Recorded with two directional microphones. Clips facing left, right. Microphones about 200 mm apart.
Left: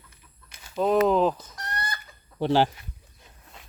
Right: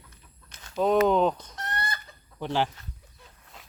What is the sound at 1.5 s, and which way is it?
Chicken, 25° right (ahead or behind).